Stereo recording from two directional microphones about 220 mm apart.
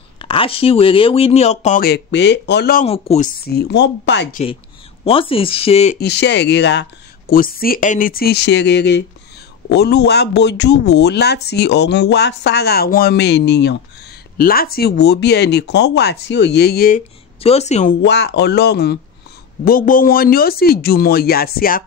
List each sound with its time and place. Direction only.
0.2 s speech: 25° left (ahead or behind)
1.9 s speech: 50° left (ahead or behind)
2.8 s a woman's voice: 30° left (ahead or behind)
3.4 s speech: 45° left (ahead or behind)
4.3 s a woman's voice: 30° left (ahead or behind)
5.9 s speech: 50° left (ahead or behind)
17.4 s a woman's voice: 30° left (ahead or behind)
18.0 s speech: 50° left (ahead or behind)